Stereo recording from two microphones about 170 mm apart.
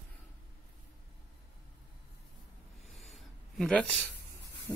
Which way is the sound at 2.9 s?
Centre (ahead or behind).